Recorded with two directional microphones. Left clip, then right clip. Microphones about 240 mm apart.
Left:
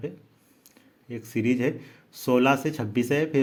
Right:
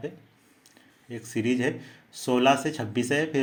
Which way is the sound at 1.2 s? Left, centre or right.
Left.